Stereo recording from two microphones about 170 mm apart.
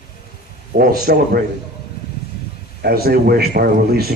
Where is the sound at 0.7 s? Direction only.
65° right (ahead or behind).